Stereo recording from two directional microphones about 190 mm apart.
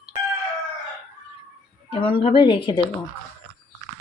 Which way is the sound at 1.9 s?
30° left (ahead or behind).